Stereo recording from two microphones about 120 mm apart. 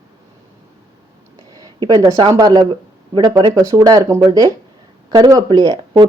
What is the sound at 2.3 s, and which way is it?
Speech, 35° right (ahead or behind).